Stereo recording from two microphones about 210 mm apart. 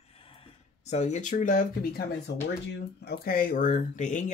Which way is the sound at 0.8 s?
35° left (ahead or behind).